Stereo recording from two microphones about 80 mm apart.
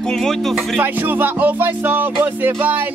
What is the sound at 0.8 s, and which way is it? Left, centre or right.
Music, right.